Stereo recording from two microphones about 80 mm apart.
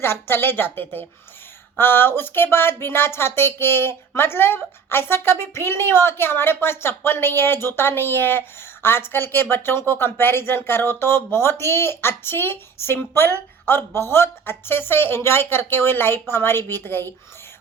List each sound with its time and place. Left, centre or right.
0.0 s a woman's voice: left